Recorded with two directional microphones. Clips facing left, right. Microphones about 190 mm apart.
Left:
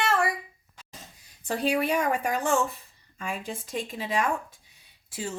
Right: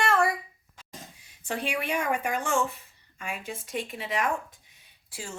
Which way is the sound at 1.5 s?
35° left (ahead or behind).